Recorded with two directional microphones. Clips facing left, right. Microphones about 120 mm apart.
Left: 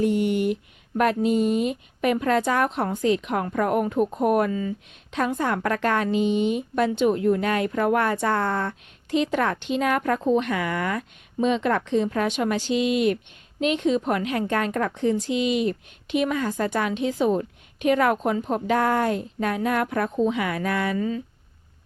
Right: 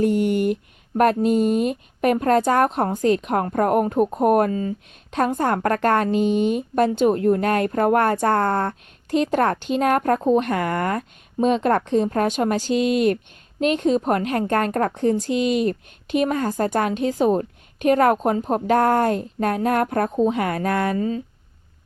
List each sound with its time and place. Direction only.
0.0 s speech: 45° right (ahead or behind)